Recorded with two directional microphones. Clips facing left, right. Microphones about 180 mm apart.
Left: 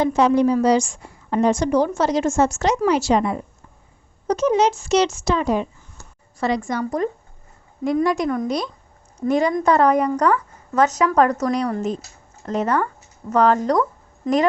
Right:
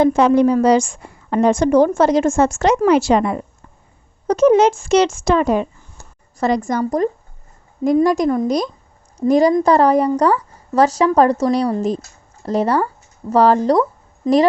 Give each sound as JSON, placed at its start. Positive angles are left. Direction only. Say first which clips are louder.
{"t": 0.0, "sound": "a woman's voice", "louder": "right 4 dB", "side_deg": -55}
{"t": 4.3, "sound": "speech", "louder": "right 6 dB", "side_deg": -55}
{"t": 6.4, "sound": "a woman's voice", "louder": "right 4 dB", "side_deg": -45}